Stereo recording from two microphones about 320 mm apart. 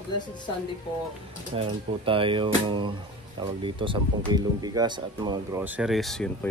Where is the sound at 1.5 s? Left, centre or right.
Centre.